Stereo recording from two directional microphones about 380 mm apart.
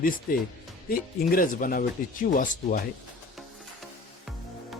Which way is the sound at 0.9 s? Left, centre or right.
Left.